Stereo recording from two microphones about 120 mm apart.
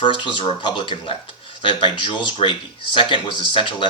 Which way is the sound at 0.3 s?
40° left (ahead or behind).